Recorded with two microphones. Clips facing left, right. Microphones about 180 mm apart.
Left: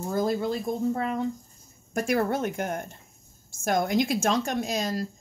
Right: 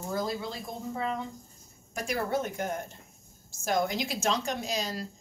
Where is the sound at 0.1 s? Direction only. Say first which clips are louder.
Left 7 dB; 50° left (ahead or behind).